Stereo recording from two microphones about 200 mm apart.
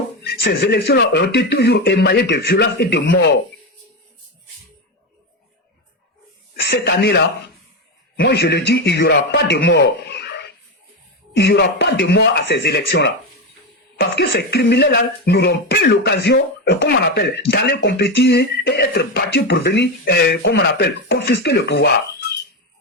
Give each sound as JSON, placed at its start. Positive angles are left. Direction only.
{"t": 0.2, "sound": "speech", "side_deg": 55}
{"t": 6.6, "sound": "speech", "side_deg": 55}